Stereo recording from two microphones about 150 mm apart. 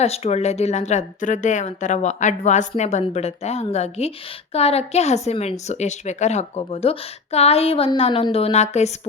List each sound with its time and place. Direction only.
0.0 s a woman's voice: 45° left (ahead or behind)